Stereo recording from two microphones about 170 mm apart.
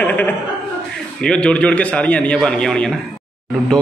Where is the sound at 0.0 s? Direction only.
10° left (ahead or behind).